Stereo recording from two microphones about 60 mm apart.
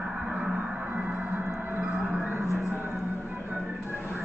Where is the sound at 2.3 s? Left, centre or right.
Right.